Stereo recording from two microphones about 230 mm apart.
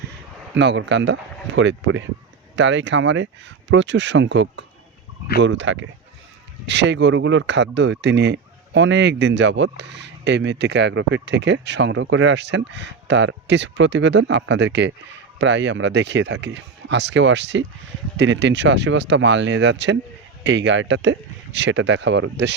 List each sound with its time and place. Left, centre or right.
0.5 s speech: right